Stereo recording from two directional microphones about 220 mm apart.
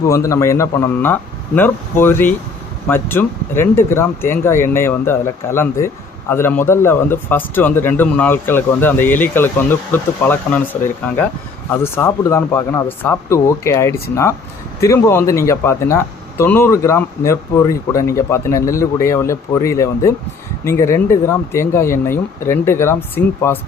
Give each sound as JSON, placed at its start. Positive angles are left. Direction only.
{"t": 0.0, "sound": "speech", "side_deg": 15}